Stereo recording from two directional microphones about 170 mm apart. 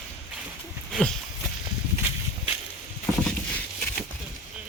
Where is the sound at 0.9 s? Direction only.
Centre (ahead or behind).